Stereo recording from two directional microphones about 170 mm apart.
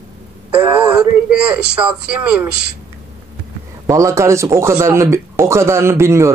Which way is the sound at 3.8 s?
20° right (ahead or behind).